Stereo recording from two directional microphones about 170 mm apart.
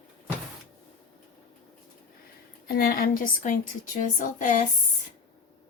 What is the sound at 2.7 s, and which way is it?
A woman's voice, 60° left (ahead or behind).